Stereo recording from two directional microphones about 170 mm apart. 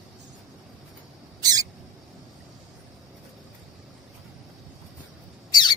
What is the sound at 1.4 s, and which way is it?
Rodents, 20° right (ahead or behind).